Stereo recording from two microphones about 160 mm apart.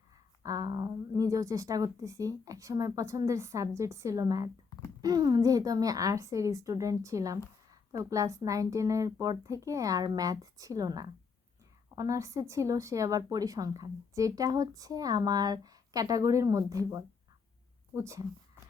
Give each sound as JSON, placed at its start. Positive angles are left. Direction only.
{"t": 0.4, "sound": "speech", "side_deg": -20}